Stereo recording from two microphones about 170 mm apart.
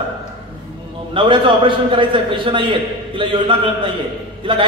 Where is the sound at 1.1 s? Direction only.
30° right (ahead or behind).